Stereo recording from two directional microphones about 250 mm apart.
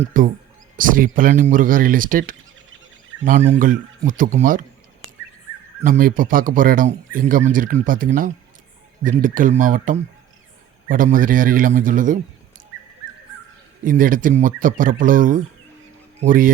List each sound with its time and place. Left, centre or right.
0.0 s a man's voice: right
5.8 s a man's voice: right
13.8 s a man's voice: right